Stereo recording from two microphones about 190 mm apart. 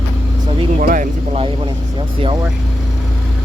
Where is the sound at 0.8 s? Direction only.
45° right (ahead or behind).